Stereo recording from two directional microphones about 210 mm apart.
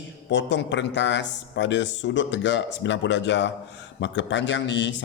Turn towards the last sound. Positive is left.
turn(degrees=60)  # may be behind; listen again after turning